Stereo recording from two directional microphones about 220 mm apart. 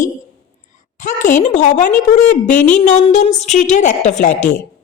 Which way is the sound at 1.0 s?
35° left (ahead or behind).